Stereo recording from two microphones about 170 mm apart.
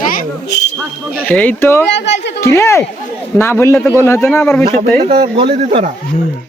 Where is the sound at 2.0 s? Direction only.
90° left.